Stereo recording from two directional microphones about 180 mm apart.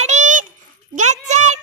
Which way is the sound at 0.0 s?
40° right (ahead or behind).